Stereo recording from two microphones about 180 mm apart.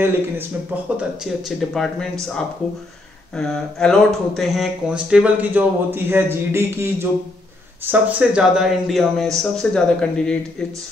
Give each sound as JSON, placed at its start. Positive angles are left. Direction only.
{"t": 0.0, "sound": "speech", "side_deg": -10}
{"t": 3.3, "sound": "speech", "side_deg": 5}